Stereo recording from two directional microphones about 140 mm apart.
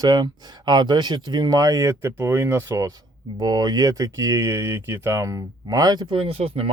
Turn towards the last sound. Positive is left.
turn(degrees=-45)  # may be behind; listen again after turning